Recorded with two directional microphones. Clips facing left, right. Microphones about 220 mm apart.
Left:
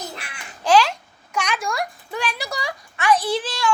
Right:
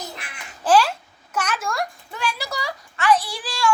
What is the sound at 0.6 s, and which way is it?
Babbling, 5° right (ahead or behind).